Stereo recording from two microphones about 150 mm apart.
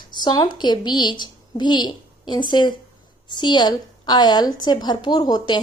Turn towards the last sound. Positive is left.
turn(degrees=30)  # may be behind; listen again after turning